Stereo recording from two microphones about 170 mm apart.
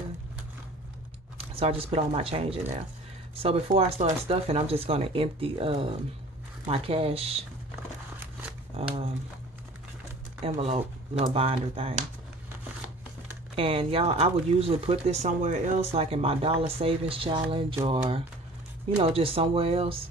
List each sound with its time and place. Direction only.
1.5 s speech: 35° right (ahead or behind)
8.7 s speech: 35° right (ahead or behind)
10.4 s speech: 40° right (ahead or behind)
13.6 s speech: 35° right (ahead or behind)